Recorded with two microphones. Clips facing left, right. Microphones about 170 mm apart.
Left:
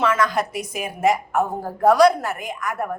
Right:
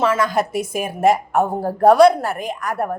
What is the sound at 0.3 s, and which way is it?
Speech, 50° right (ahead or behind).